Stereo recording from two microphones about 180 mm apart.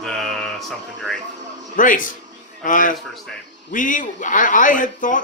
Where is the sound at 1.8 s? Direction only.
45° left (ahead or behind).